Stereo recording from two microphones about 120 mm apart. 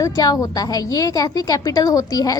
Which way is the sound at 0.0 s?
30° left (ahead or behind).